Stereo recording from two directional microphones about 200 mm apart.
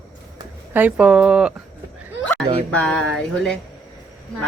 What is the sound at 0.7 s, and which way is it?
Speech, 5° right (ahead or behind).